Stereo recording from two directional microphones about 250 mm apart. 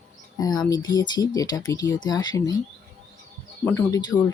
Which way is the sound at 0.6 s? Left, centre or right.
Centre.